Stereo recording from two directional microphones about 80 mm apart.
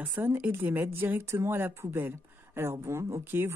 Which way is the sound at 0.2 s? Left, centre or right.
Right.